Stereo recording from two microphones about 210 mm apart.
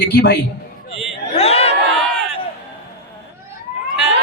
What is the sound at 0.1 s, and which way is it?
Speech, 55° left (ahead or behind).